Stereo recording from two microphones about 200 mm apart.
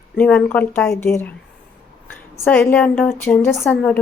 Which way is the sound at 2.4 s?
10° left (ahead or behind).